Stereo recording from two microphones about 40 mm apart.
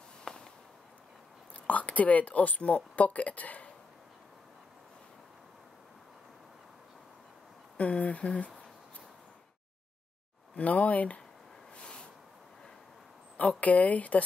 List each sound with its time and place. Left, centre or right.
0.2 s firecracker: centre
1.7 s speech: left
7.7 s speech: left
10.5 s speech: left
11.7 s a sound: left
13.6 s speech: left